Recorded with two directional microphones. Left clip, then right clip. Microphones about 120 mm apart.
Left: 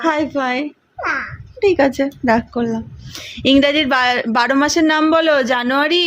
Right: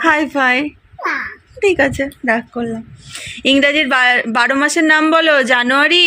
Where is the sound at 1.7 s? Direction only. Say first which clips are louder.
Even; 20° left (ahead or behind).